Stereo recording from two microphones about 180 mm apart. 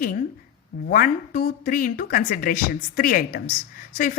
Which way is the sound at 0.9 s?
50° left (ahead or behind).